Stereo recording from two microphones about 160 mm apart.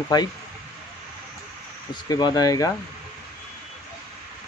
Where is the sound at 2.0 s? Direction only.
25° left (ahead or behind).